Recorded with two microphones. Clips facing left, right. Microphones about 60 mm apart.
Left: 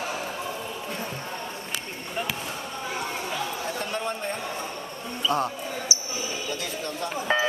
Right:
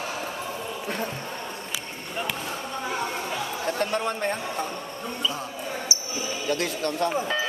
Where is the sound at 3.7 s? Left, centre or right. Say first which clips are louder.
Right 4 dB; right.